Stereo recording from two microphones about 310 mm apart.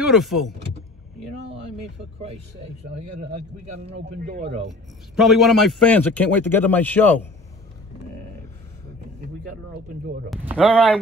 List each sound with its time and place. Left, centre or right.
0.0 s speech: centre
3.9 s speech: right
5.1 s a man's voice: centre
10.3 s a man's voice: centre